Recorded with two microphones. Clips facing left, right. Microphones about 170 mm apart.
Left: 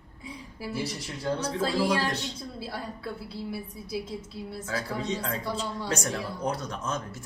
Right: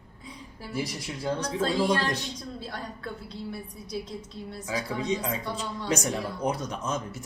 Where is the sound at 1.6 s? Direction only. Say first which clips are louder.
Right 1 dB; 10° left (ahead or behind).